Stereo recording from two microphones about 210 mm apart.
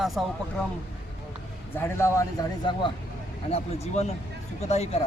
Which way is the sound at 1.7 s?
10° left (ahead or behind).